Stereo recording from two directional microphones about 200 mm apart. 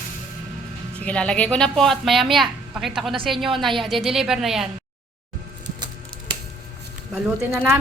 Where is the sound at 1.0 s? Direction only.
5° left (ahead or behind).